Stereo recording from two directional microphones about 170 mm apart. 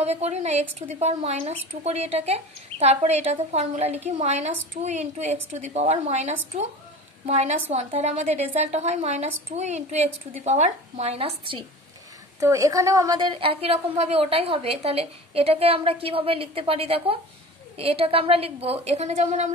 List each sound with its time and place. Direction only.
0.0 s a woman's voice: 40° right (ahead or behind)
12.4 s a woman's voice: 20° right (ahead or behind); by 19.5 s 45° right (ahead or behind)